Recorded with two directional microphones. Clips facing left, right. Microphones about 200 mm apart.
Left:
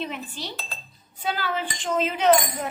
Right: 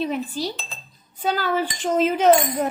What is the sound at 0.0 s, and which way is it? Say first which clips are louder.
Speech: right 8 dB; 40° right (ahead or behind).